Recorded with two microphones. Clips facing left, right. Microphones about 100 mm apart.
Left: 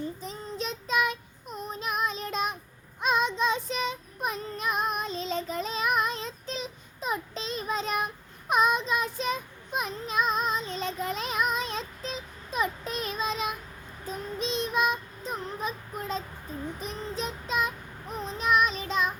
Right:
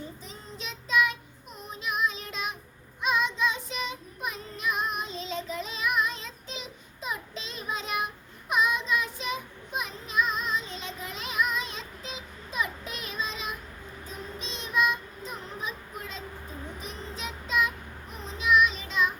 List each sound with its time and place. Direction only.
0.2 s child singing: 40° left (ahead or behind)